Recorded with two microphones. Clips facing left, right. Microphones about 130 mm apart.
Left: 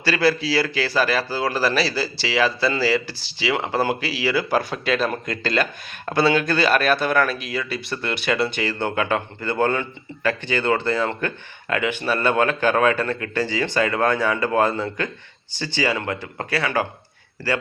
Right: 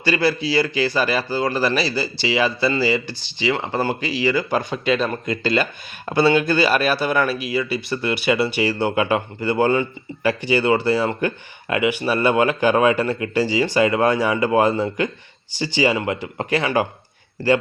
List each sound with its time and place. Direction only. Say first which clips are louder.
0.0 s a man's voice: even; centre (ahead or behind); by 16.8 s 15° right (ahead or behind)